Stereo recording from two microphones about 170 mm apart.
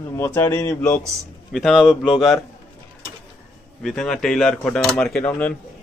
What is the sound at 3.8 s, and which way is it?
A man's voice, centre (ahead or behind).